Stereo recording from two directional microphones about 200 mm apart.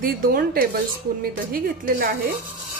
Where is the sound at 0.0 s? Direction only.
45° right (ahead or behind).